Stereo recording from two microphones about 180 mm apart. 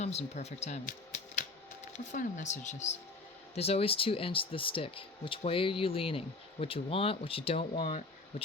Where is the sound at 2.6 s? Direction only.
40° left (ahead or behind).